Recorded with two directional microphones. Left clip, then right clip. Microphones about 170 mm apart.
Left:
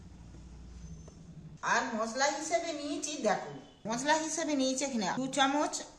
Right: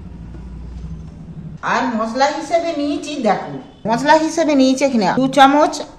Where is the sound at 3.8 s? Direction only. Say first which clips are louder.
Right 17 dB; 30° right (ahead or behind).